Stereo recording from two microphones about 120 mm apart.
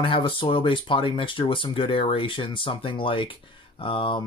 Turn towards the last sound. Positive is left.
turn(degrees=45)  # may be behind; listen again after turning